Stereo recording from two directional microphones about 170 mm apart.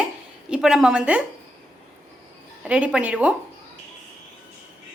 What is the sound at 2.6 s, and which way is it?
Speech, 5° right (ahead or behind).